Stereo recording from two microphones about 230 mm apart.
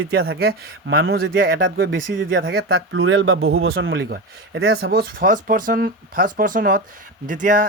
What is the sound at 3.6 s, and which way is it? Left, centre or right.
Speech, right.